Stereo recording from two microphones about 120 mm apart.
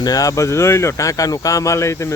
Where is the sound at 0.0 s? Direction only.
30° left (ahead or behind).